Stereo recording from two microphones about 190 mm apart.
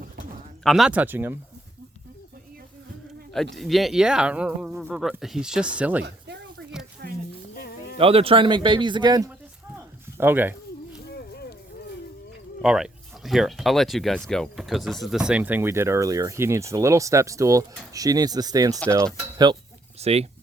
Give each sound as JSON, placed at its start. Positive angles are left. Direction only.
{"t": 0.6, "sound": "speech", "side_deg": 0}
{"t": 3.5, "sound": "speech", "side_deg": 0}
{"t": 6.1, "sound": "a sound", "side_deg": -65}
{"t": 7.9, "sound": "speech", "side_deg": -30}
{"t": 10.2, "sound": "speech", "side_deg": -10}
{"t": 12.6, "sound": "speech", "side_deg": -5}
{"t": 20.0, "sound": "speech", "side_deg": -35}